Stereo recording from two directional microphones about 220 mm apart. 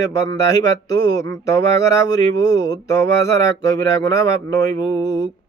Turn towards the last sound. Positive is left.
turn(degrees=15)  # may be behind; listen again after turning